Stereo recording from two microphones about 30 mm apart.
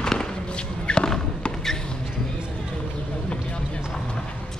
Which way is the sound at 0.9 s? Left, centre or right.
Left.